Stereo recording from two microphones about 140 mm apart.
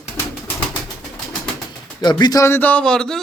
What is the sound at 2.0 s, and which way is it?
A man's voice, 30° left (ahead or behind).